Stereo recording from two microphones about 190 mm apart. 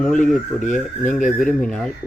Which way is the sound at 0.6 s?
40° left (ahead or behind).